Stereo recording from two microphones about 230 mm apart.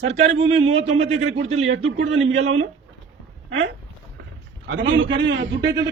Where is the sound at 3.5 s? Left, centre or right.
Right.